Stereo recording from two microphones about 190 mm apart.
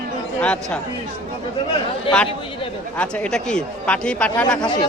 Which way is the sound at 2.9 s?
5° left (ahead or behind).